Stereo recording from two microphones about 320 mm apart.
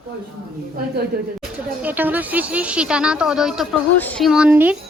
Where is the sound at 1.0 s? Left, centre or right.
Right.